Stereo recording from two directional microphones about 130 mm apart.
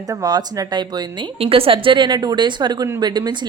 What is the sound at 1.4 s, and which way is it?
A woman's voice, 45° right (ahead or behind).